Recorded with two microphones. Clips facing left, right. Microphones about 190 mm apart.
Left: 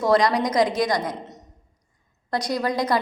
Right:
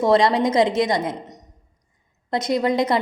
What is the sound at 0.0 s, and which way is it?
A woman's voice, 25° right (ahead or behind).